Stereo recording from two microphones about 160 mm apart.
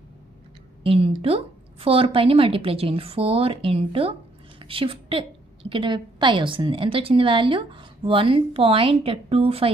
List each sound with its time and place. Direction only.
0.8 s a woman's voice: 35° right (ahead or behind)